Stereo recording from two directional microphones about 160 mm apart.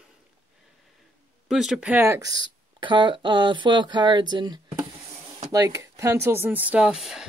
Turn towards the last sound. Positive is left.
turn(degrees=-5)  # may be behind; listen again after turning